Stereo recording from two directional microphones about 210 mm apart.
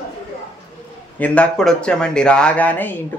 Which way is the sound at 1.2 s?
5° left (ahead or behind).